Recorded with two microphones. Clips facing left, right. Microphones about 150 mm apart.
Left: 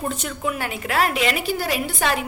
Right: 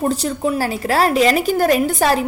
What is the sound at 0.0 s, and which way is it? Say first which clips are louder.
A woman's voice: right 7 dB; 35° right (ahead or behind).